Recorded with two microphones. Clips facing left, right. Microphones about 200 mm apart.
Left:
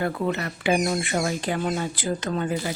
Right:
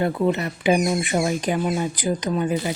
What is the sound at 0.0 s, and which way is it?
Speech, 20° right (ahead or behind).